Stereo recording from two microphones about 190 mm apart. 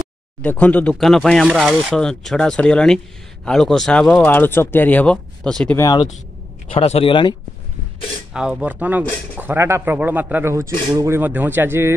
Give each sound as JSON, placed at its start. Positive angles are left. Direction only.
{"t": 0.4, "sound": "speech", "side_deg": 10}
{"t": 5.8, "sound": "speech", "side_deg": 20}
{"t": 6.7, "sound": "speech", "side_deg": 30}
{"t": 8.3, "sound": "speech", "side_deg": -5}